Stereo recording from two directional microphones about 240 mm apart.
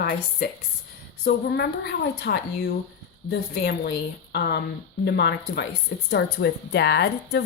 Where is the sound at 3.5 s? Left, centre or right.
Left.